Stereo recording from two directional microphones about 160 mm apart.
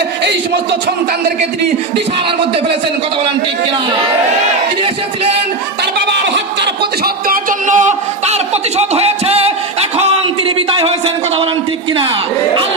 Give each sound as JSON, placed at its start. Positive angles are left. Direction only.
{"t": 6.2, "sound": "speech", "side_deg": -90}